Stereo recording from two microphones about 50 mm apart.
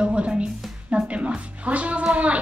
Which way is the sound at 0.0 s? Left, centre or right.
Right.